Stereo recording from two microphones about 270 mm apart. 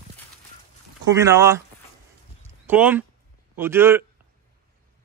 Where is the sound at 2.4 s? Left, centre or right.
Centre.